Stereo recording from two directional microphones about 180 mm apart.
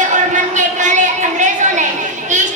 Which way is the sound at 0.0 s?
45° right (ahead or behind).